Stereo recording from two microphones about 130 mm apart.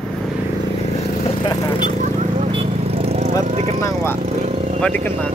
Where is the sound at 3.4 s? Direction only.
55° right (ahead or behind).